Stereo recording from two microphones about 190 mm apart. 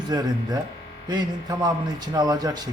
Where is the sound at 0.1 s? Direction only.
20° right (ahead or behind).